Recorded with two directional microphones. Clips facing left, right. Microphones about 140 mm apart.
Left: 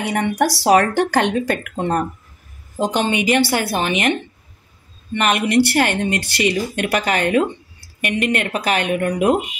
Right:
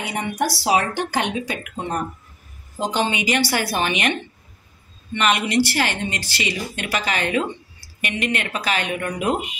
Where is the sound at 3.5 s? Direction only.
30° left (ahead or behind).